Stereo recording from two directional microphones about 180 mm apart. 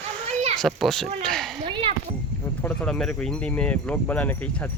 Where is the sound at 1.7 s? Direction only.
30° right (ahead or behind).